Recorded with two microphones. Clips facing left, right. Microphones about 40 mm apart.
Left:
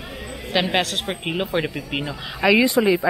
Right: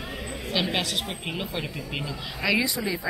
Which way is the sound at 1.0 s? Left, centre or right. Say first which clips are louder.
Left 6 dB; left.